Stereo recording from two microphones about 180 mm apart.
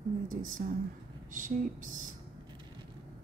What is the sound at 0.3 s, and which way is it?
Speech, 45° right (ahead or behind).